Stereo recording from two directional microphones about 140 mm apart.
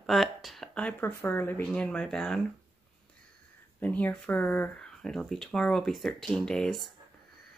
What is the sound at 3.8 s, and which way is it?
Speech, 10° left (ahead or behind).